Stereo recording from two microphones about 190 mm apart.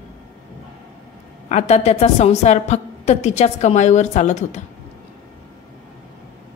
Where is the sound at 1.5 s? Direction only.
35° left (ahead or behind).